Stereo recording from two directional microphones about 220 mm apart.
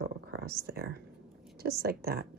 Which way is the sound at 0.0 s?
50° right (ahead or behind).